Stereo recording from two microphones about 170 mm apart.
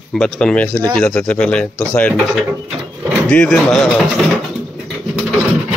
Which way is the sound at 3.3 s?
5° left (ahead or behind).